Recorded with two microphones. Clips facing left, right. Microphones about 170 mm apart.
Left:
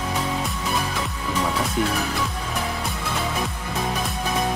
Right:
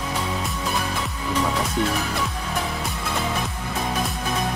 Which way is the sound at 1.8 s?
5° left (ahead or behind).